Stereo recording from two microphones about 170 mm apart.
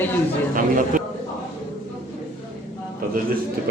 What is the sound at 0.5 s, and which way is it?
Speech, 50° right (ahead or behind).